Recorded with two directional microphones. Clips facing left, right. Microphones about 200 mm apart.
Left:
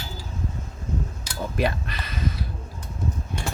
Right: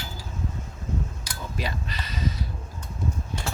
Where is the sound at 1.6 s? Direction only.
60° left (ahead or behind).